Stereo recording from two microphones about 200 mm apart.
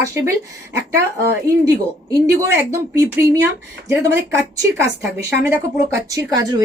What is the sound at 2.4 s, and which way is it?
Speech, 15° right (ahead or behind).